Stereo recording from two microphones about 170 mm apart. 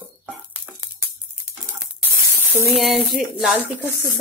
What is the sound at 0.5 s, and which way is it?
Music, 10° right (ahead or behind).